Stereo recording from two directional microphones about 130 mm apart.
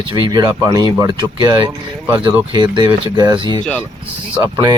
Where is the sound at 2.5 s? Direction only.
35° right (ahead or behind).